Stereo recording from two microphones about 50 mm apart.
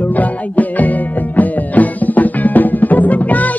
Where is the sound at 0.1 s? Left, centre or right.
Left.